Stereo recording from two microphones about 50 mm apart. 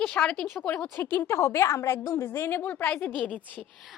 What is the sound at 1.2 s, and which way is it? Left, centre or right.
A woman's voice, left.